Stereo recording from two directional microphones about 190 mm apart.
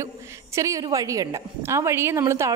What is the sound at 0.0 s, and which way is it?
A woman's voice, 15° right (ahead or behind).